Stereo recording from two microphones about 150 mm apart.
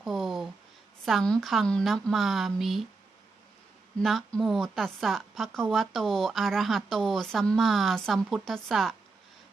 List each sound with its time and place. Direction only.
0.0 s a sound: centre (ahead or behind)
1.0 s a woman's voice: centre (ahead or behind)
4.0 s a woman's voice: centre (ahead or behind)